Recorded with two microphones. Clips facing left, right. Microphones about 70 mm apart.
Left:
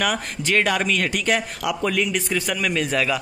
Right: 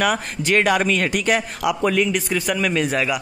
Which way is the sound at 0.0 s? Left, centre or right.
Right.